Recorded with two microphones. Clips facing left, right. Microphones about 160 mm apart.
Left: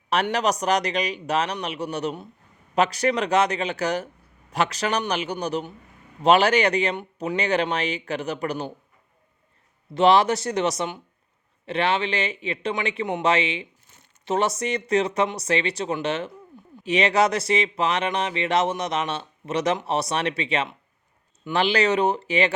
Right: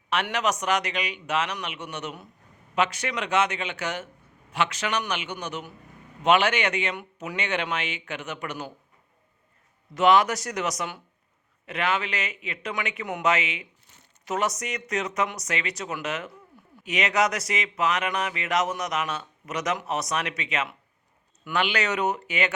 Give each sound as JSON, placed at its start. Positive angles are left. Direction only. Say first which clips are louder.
{"t": 0.1, "sound": "speech", "louder": "left 4 dB", "side_deg": 35}
{"t": 9.9, "sound": "speech", "louder": "left 2 dB", "side_deg": 30}